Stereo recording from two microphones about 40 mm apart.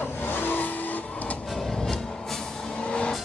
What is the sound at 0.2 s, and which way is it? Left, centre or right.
Vehicle, left.